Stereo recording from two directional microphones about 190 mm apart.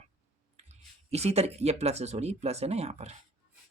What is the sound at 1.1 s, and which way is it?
Speech, 35° right (ahead or behind).